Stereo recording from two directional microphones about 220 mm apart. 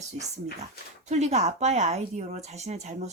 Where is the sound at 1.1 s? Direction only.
30° right (ahead or behind).